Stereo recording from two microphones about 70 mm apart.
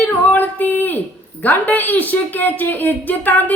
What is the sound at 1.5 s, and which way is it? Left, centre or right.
Speech, left.